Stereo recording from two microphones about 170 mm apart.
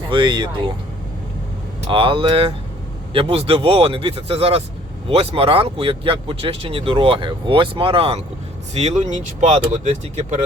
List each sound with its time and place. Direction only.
0.1 s speech: 25° right (ahead or behind)
1.9 s speech: 30° right (ahead or behind)